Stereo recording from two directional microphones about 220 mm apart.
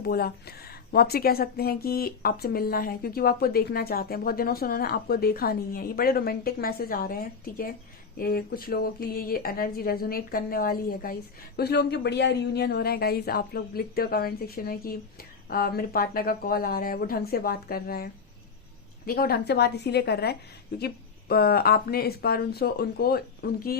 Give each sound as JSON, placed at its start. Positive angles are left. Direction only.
{"t": 0.0, "sound": "speech", "side_deg": 45}